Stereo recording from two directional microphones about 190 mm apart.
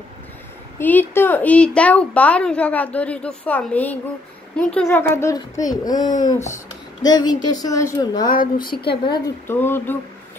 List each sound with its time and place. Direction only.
0.7 s a woman's voice: 10° left (ahead or behind)
8.3 s speech: 50° left (ahead or behind)
9.0 s a woman's voice: 20° left (ahead or behind)